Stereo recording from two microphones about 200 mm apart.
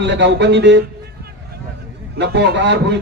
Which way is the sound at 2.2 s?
55° right (ahead or behind).